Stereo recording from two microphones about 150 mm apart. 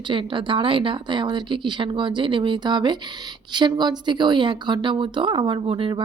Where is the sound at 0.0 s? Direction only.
35° right (ahead or behind).